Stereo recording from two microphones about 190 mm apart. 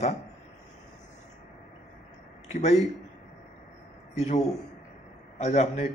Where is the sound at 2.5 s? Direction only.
35° left (ahead or behind).